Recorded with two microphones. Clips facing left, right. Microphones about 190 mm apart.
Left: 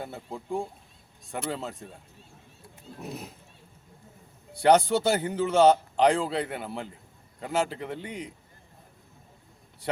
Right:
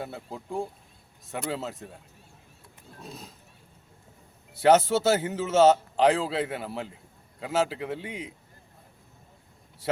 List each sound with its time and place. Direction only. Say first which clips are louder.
0.0 s a man's voice: even; centre (ahead or behind)
3.0 s speech: left 5 dB; 25° left (ahead or behind)
4.5 s a man's voice: right 1 dB; 5° right (ahead or behind)